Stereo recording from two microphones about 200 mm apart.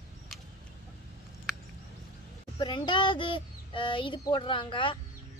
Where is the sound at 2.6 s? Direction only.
25° left (ahead or behind).